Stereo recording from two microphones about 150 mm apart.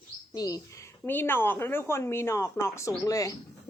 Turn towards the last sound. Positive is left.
turn(degrees=20)  # may be behind; listen again after turning